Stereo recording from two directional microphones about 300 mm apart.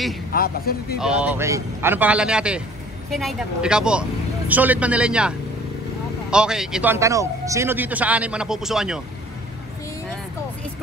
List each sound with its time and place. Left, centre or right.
0.3 s a man's voice: left
0.9 s a man's voice: centre
6.3 s a man's voice: centre